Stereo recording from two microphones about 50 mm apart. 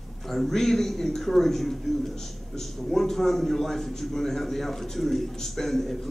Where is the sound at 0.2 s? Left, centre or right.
Centre.